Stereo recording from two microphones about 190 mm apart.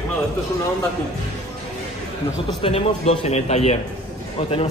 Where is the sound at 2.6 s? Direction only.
30° left (ahead or behind).